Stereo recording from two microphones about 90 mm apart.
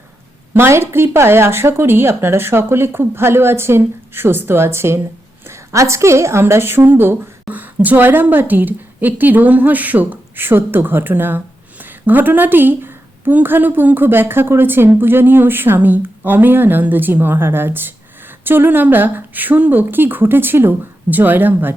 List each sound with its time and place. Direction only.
0.5 s a woman's voice: 25° right (ahead or behind)